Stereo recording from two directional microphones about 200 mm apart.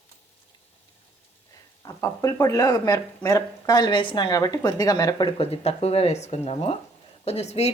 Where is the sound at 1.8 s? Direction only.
15° left (ahead or behind).